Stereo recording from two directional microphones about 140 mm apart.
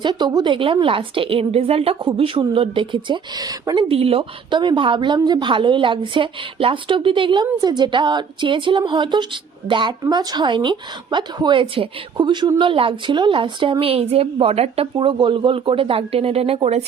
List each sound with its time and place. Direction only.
0.0 s speech: 30° right (ahead or behind)
3.8 s speech: 45° right (ahead or behind)